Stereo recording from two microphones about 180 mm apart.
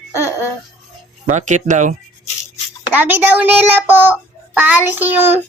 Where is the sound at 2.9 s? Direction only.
10° right (ahead or behind).